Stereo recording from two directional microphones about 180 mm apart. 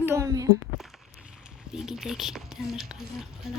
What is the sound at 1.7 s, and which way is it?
A child's voice, 5° right (ahead or behind).